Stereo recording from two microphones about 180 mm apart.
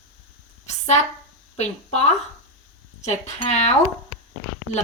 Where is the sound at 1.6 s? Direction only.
35° left (ahead or behind).